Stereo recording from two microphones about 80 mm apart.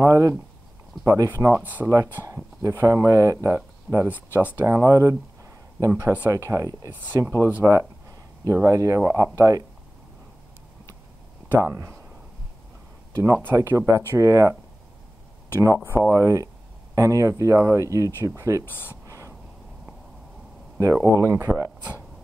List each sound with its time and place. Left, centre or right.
0.0 s speech: right
1.6 s speech: right
2.2 s speech: right
4.6 s speech: right
11.4 s speech: right
13.1 s speech: right
13.4 s speech: right
15.6 s speech: right
15.9 s speech: right
16.2 s speech: right
19.0 s a sound: right
20.8 s speech: right